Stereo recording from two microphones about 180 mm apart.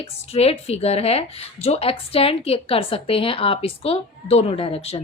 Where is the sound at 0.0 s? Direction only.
35° left (ahead or behind).